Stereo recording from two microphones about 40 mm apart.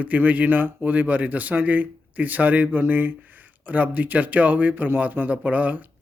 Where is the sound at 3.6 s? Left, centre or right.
Right.